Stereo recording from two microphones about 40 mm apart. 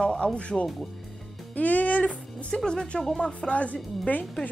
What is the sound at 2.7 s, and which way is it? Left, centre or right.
A woman's voice, centre.